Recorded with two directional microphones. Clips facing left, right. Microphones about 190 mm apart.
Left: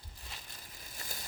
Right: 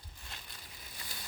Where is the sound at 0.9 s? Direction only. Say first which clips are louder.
Left 3 dB; 45° left (ahead or behind).